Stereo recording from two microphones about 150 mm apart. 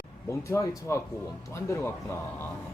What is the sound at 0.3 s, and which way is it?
Speech, 20° left (ahead or behind).